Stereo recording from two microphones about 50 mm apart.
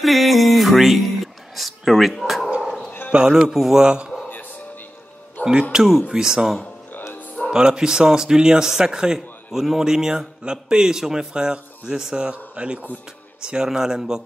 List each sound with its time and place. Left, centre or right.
0.0 s a sound: centre
3.1 s speech: centre
5.4 s speech: centre
12.3 s speech: right
13.4 s speech: centre